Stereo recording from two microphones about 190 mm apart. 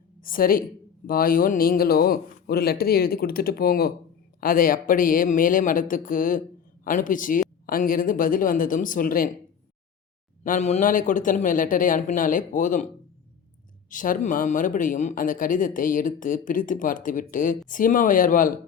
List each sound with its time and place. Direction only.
0.2 s a woman's voice: 50° left (ahead or behind)
10.4 s speech: 40° left (ahead or behind)
13.9 s speech: 45° left (ahead or behind)